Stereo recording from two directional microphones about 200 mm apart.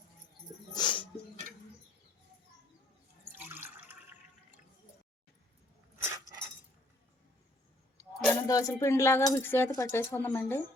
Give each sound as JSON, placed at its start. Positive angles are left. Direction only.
{"t": 0.7, "sound": "a sound", "side_deg": 20}
{"t": 3.5, "sound": "water", "side_deg": -10}
{"t": 8.2, "sound": "speech", "side_deg": 10}